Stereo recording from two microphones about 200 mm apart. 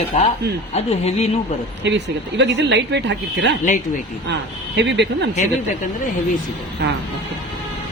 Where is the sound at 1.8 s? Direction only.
60° right (ahead or behind).